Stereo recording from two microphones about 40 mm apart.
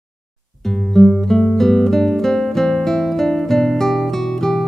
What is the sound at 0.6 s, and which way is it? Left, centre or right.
Guitar, centre.